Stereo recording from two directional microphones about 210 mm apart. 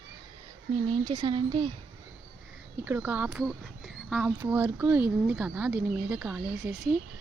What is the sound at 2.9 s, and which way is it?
Speech, 5° right (ahead or behind).